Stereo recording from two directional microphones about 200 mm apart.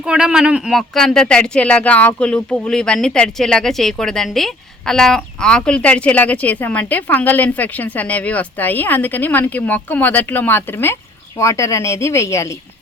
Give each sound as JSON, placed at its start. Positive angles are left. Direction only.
{"t": 0.0, "sound": "speech", "side_deg": -5}